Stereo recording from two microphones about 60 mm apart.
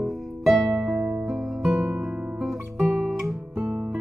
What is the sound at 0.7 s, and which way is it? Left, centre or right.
Music, centre.